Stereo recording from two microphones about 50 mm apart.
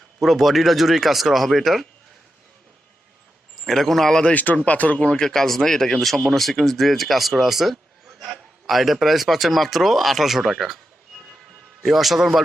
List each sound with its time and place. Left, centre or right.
0.2 s speech: centre
3.6 s speech: centre
4.5 s speech: left
4.9 s speech: centre
11.8 s speech: centre